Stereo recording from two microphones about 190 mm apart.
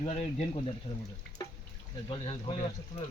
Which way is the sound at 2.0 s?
30° left (ahead or behind).